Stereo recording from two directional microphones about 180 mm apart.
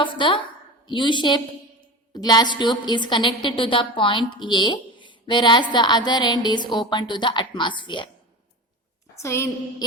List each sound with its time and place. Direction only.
0.0 s a woman's voice: 25° left (ahead or behind)
9.2 s a woman's voice: 15° left (ahead or behind)